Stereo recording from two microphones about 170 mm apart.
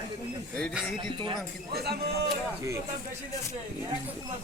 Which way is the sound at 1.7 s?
65° right (ahead or behind).